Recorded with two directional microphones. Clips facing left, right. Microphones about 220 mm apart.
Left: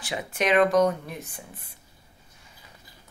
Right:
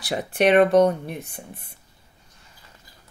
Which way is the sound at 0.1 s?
35° right (ahead or behind).